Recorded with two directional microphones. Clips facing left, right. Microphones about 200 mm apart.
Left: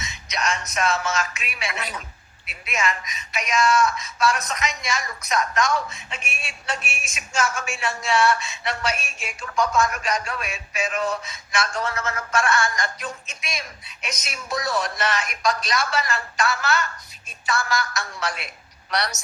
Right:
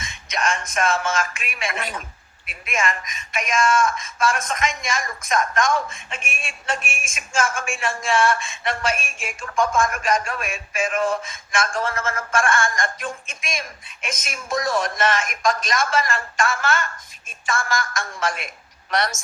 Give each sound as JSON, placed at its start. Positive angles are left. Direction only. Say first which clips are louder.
{"t": 0.0, "sound": "music", "louder": "right 2 dB", "side_deg": -50}
{"t": 2.5, "sound": "speech", "louder": "right 1 dB", "side_deg": -50}